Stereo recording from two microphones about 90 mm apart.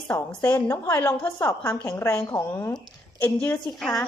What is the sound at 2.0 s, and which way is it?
A woman's voice, 30° left (ahead or behind).